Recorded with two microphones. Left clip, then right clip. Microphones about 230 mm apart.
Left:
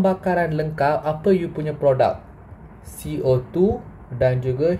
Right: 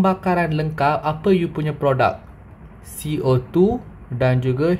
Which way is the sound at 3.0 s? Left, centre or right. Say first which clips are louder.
Even; right.